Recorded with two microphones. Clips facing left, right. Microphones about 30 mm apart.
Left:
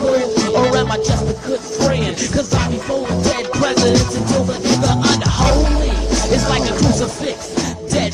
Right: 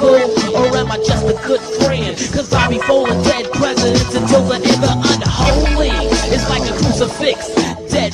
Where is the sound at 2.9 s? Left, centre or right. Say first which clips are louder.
Right 7 dB; right.